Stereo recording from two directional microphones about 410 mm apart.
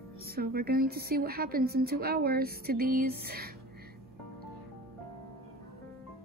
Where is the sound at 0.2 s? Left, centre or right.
Right.